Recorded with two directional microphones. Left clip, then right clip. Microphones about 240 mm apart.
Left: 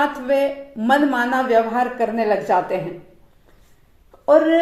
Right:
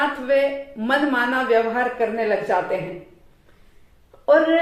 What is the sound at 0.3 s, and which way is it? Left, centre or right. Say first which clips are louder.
Speech: even; left.